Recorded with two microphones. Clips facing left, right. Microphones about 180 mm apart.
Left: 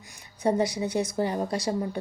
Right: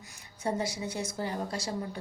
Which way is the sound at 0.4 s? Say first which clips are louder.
Left 7 dB; 15° left (ahead or behind).